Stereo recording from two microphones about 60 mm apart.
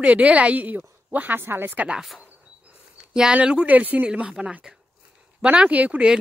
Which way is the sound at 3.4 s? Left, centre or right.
Centre.